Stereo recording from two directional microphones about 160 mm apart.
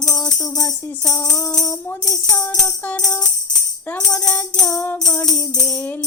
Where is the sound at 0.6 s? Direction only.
20° left (ahead or behind).